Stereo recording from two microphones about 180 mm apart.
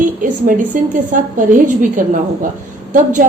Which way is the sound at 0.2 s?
50° right (ahead or behind).